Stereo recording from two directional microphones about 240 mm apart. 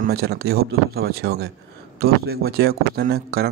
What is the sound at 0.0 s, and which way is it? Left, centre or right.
A man's voice, right.